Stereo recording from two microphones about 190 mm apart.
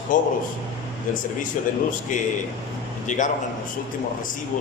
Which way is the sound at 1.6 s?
40° left (ahead or behind).